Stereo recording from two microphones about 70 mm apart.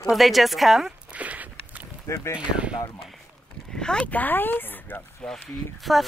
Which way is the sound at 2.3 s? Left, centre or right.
Centre.